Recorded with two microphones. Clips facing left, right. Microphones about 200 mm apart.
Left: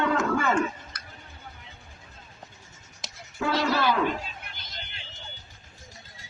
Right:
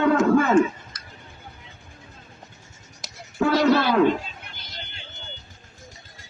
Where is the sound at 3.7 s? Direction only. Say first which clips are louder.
Right 6 dB; 50° right (ahead or behind).